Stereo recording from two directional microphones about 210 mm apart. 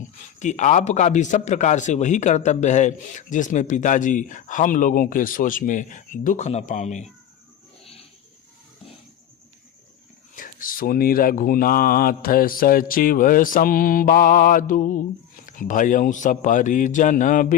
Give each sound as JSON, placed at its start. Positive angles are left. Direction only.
{"t": 0.3, "sound": "a man's voice", "side_deg": 35}
{"t": 10.3, "sound": "a man's voice", "side_deg": 40}